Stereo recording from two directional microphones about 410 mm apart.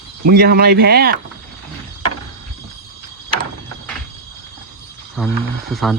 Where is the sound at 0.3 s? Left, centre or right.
Right.